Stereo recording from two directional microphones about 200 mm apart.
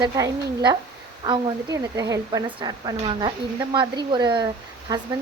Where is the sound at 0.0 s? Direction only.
20° right (ahead or behind).